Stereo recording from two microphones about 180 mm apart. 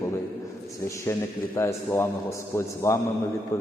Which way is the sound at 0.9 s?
15° left (ahead or behind).